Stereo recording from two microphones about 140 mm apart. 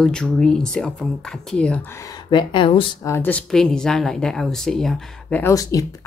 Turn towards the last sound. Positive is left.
turn(degrees=25)  # may be behind; listen again after turning